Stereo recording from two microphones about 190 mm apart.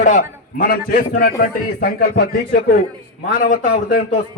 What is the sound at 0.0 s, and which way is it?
A man's voice, 45° left (ahead or behind).